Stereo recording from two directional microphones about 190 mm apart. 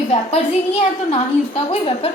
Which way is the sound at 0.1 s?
30° left (ahead or behind).